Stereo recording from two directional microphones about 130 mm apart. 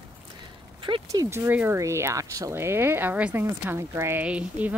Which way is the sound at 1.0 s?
25° right (ahead or behind).